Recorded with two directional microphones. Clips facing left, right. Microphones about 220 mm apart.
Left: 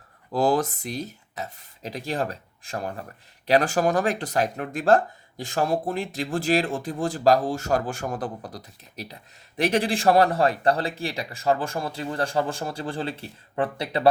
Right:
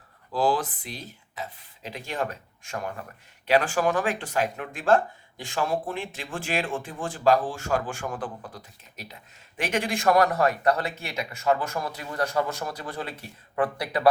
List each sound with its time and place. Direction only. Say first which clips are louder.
0.3 s speech: left 3 dB; 45° left (ahead or behind); by 14.1 s 25° left (ahead or behind)